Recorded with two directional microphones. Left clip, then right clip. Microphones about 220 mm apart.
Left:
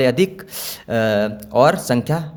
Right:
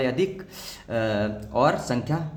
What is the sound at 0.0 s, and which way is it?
Speech, 50° left (ahead or behind).